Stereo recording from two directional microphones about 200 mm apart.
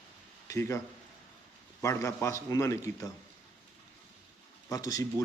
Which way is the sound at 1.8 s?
15° left (ahead or behind).